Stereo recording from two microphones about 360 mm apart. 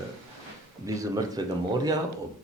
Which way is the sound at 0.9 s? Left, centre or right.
Centre.